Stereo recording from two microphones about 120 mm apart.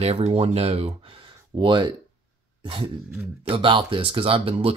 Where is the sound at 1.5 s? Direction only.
40° right (ahead or behind).